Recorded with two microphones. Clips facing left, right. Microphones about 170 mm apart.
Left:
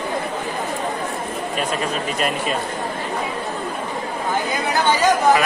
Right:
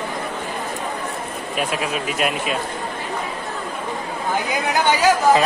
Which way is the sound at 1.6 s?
5° right (ahead or behind).